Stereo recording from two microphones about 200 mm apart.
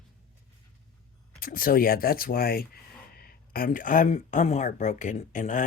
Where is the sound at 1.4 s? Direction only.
45° left (ahead or behind).